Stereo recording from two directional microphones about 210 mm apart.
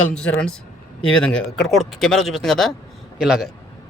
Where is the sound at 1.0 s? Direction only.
75° left (ahead or behind).